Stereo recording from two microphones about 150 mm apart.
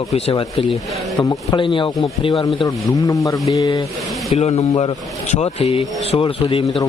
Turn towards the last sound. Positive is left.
turn(degrees=35)  # may be behind; listen again after turning